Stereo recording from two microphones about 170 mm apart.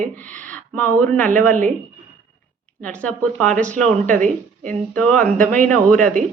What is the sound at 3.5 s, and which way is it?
Speech, 45° right (ahead or behind).